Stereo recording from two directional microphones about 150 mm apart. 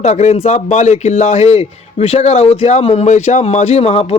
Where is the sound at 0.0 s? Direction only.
50° left (ahead or behind).